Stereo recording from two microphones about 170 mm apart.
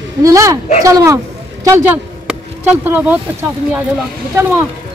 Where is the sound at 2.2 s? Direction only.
10° right (ahead or behind).